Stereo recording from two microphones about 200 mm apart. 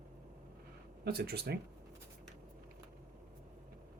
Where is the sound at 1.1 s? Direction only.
50° right (ahead or behind).